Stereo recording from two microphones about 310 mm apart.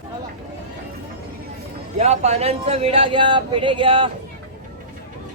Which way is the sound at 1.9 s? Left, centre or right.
Right.